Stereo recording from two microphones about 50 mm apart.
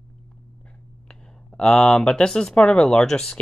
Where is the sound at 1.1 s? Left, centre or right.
Centre.